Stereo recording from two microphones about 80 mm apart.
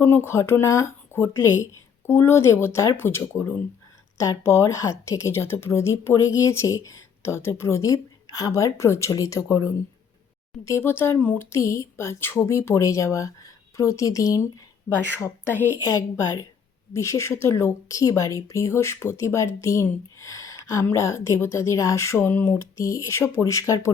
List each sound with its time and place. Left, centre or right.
0.0 s a woman's voice: left
10.7 s a woman's voice: left
14.9 s a woman's voice: left
15.8 s a woman's voice: left
22.5 s a woman's voice: left